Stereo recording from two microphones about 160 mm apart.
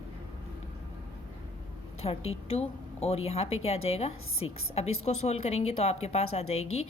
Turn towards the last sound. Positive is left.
turn(degrees=40)  # may be behind; listen again after turning